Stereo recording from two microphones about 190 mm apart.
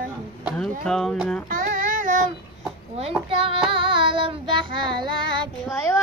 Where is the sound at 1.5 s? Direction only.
45° right (ahead or behind).